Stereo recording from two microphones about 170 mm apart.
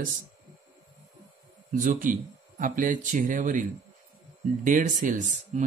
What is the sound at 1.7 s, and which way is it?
Speech, 50° right (ahead or behind).